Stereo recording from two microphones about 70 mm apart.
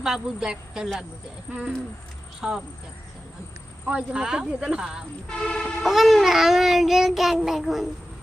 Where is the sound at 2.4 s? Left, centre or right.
Centre.